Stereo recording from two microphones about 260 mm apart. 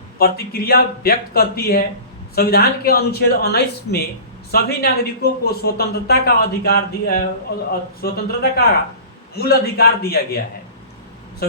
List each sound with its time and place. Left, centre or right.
0.2 s speech: left